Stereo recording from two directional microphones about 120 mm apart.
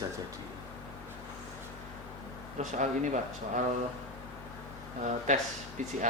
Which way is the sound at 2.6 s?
80° right.